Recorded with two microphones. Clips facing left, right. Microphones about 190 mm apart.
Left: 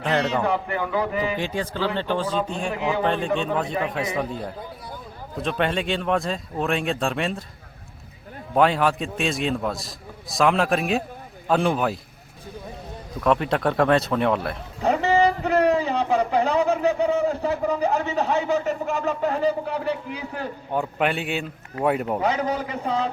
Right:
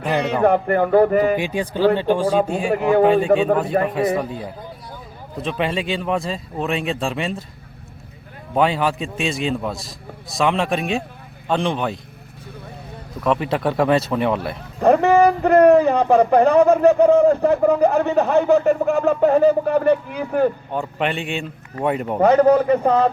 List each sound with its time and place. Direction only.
0.4 s speech: 55° right (ahead or behind)
1.4 s speech: 15° right (ahead or behind)
2.7 s speech: 55° right (ahead or behind)
4.2 s a man's voice: 5° right (ahead or behind)
8.5 s a man's voice: centre (ahead or behind)
13.2 s a man's voice: centre (ahead or behind)
14.8 s a man's voice: 55° right (ahead or behind)
20.7 s a man's voice: 5° left (ahead or behind)
22.2 s a man's voice: 55° right (ahead or behind)